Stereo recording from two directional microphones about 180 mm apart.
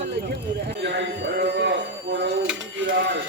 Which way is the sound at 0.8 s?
75° right (ahead or behind).